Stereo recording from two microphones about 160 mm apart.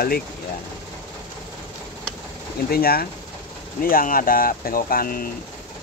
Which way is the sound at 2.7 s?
70° left (ahead or behind).